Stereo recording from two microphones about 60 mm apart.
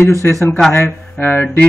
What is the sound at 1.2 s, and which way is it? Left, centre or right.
Speech, left.